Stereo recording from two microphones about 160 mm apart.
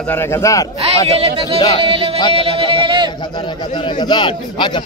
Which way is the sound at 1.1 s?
40° right (ahead or behind).